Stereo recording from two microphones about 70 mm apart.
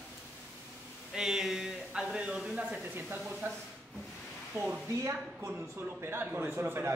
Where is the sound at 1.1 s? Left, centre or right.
Centre.